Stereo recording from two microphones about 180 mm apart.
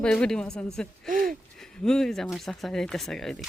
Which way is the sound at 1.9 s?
5° left (ahead or behind).